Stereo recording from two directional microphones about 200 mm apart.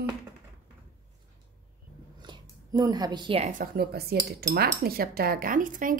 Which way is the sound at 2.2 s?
20° right (ahead or behind).